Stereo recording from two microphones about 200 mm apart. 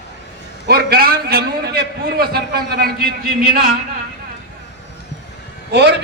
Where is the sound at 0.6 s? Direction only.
50° right (ahead or behind).